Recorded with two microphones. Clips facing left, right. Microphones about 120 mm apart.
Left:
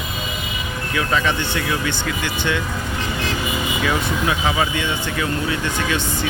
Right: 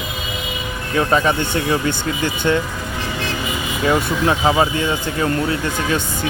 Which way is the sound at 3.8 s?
35° right (ahead or behind).